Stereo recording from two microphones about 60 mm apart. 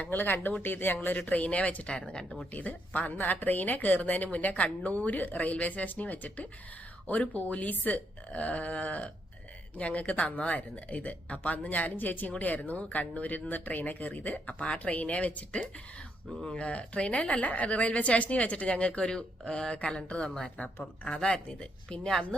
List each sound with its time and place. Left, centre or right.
0.0 s speech: left; by 2.4 s centre
2.5 s speech: left